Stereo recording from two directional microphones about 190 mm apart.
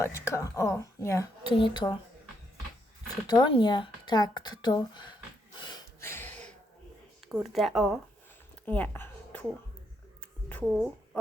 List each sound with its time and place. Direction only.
0.0 s speech: 15° left (ahead or behind)
3.2 s speech: 25° left (ahead or behind)
5.5 s a sound: 20° left (ahead or behind)
7.4 s speech: centre (ahead or behind)
8.6 s a sound: 10° left (ahead or behind)
10.7 s a woman's voice: centre (ahead or behind)